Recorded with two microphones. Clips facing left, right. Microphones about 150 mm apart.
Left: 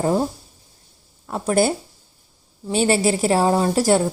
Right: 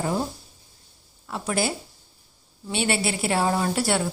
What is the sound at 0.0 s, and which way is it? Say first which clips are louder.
Speech: left 6 dB; 40° left (ahead or behind).